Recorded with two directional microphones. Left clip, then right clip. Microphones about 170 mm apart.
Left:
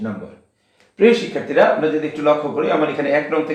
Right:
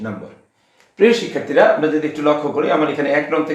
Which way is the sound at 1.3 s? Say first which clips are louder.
Right 2 dB; 25° right (ahead or behind).